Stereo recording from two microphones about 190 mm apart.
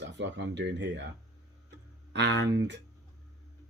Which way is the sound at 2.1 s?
70° right (ahead or behind).